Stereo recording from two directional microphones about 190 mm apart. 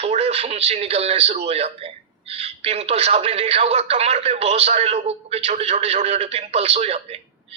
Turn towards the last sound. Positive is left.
turn(degrees=-30)  # may be behind; listen again after turning